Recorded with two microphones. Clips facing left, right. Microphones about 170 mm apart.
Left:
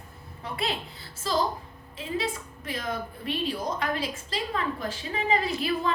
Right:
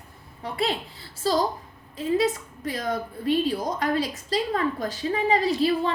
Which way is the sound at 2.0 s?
40° right (ahead or behind).